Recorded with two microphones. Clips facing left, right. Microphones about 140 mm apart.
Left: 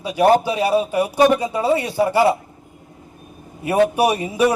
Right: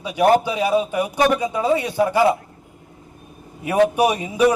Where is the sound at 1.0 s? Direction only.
25° left (ahead or behind).